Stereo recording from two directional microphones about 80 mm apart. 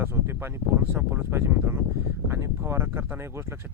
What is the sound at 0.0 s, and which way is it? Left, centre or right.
Speech, right.